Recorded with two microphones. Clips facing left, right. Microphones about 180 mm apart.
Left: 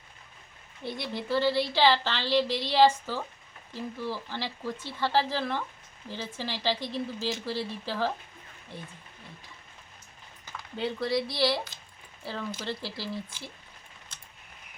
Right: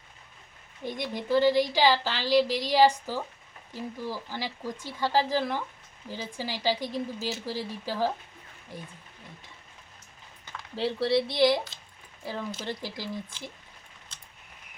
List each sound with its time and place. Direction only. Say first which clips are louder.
0.8 s speech: right 1 dB; 15° right (ahead or behind)
10.4 s a sound: even; centre (ahead or behind)
10.8 s speech: right 3 dB; 30° right (ahead or behind); by 13.5 s 15° right (ahead or behind)